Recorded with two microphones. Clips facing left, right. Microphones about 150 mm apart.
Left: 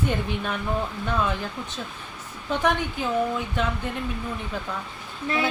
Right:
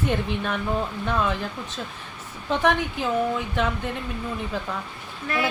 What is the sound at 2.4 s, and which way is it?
Speech, centre (ahead or behind).